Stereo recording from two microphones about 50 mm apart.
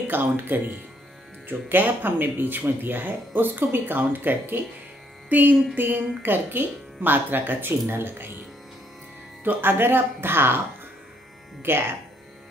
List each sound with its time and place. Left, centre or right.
0.0 s speech: right
9.4 s speech: right
11.7 s speech: right